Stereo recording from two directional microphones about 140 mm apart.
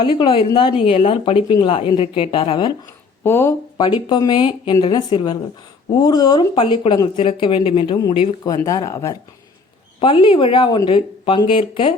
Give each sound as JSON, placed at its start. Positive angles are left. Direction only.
{"t": 0.0, "sound": "speech", "side_deg": 35}
{"t": 2.8, "sound": "a sound", "side_deg": 15}
{"t": 3.8, "sound": "speech", "side_deg": 30}
{"t": 8.4, "sound": "speech", "side_deg": 25}
{"t": 10.0, "sound": "speech", "side_deg": 40}